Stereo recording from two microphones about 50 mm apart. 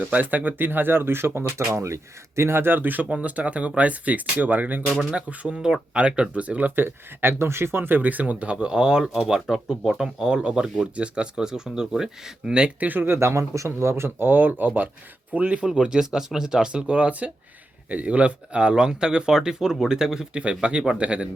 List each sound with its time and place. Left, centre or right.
0.0 s speech: right
5.1 s speech: right
5.5 s speech: centre
12.9 s speech: right
13.1 s speech: right
15.3 s speech: right
15.6 s speech: centre
20.4 s speech: right